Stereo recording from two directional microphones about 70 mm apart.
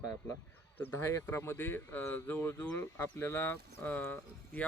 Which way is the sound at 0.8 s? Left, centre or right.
Left.